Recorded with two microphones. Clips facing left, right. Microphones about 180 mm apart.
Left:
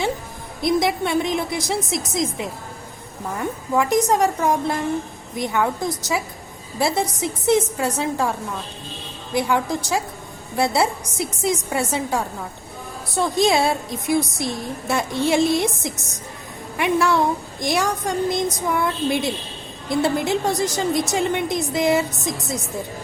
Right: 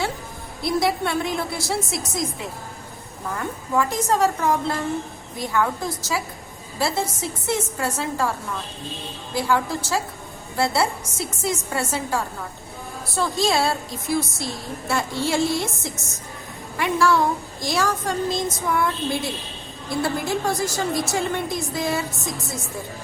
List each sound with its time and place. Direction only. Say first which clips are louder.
0.6 s a woman's voice: left 2 dB; 20° left (ahead or behind)
16.7 s a woman's voice: left 1 dB; 20° left (ahead or behind)